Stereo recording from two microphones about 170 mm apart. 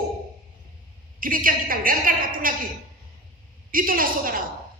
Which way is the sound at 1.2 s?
55° right (ahead or behind).